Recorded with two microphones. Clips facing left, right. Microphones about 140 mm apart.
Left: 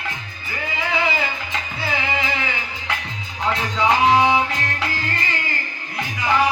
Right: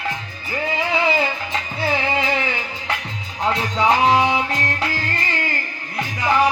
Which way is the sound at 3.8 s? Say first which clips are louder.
Even; 35° right (ahead or behind).